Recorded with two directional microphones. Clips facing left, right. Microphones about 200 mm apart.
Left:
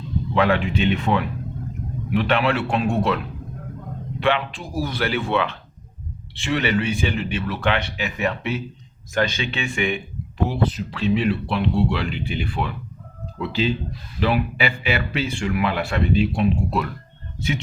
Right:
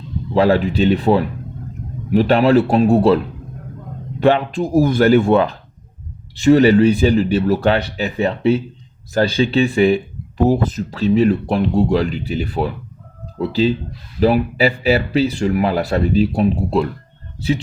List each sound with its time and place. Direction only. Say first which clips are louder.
0.3 s speech: right 6 dB; 35° right (ahead or behind)
4.2 s speech: right 8 dB; 40° right (ahead or behind)